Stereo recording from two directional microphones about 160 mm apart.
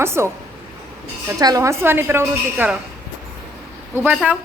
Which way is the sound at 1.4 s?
25° right (ahead or behind).